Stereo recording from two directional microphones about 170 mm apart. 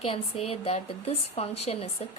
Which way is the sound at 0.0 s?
35° left (ahead or behind).